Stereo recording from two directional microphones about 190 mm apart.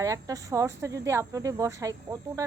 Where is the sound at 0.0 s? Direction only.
15° right (ahead or behind).